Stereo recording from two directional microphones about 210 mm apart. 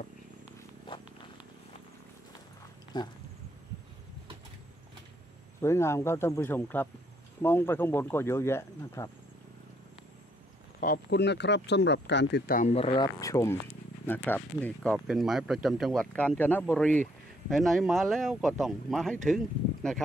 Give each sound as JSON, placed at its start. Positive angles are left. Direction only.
{"t": 0.8, "sound": "purr", "side_deg": 25}
{"t": 2.9, "sound": "speech", "side_deg": 20}
{"t": 5.6, "sound": "speech", "side_deg": 10}
{"t": 10.8, "sound": "speech", "side_deg": 50}